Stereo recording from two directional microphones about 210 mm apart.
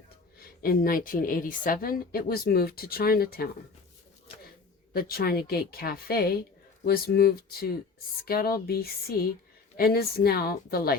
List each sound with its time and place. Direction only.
0.3 s a woman's voice: 45° left (ahead or behind)
4.9 s a woman's voice: 45° left (ahead or behind)